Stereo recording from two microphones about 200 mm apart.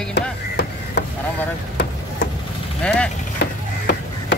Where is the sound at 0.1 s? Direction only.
55° left (ahead or behind).